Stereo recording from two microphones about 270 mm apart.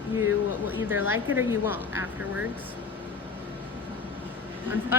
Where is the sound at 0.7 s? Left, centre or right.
Centre.